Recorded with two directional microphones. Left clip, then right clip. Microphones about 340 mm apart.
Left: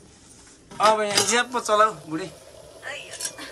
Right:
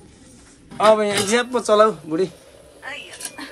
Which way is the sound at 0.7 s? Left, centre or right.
Centre.